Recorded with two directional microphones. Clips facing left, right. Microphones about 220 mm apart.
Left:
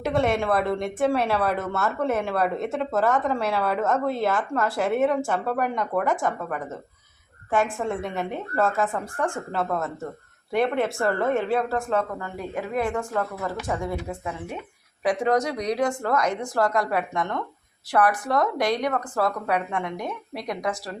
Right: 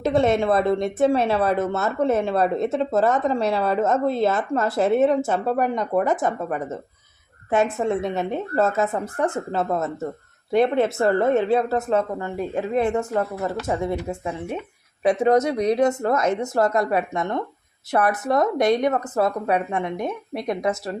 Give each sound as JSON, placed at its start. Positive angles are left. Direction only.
{"t": 0.0, "sound": "a woman's voice", "side_deg": -25}